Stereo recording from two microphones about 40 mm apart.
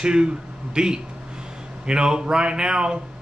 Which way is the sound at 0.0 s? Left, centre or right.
Right.